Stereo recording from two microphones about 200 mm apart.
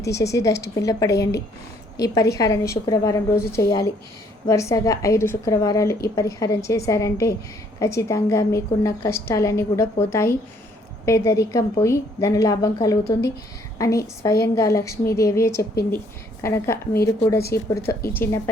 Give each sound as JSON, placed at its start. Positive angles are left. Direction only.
{"t": 0.3, "sound": "a woman's voice", "side_deg": 15}